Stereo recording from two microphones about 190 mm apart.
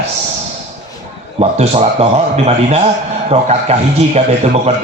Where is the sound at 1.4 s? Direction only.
35° right (ahead or behind).